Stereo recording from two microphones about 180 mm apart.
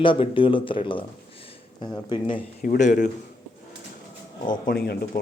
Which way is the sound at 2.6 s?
45° left (ahead or behind).